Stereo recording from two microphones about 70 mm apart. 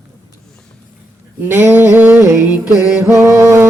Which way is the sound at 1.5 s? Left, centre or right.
Right.